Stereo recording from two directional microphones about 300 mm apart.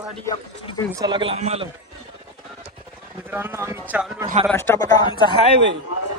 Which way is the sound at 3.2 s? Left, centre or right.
Centre.